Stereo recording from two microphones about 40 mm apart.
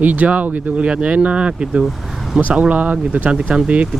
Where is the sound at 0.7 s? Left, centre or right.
Right.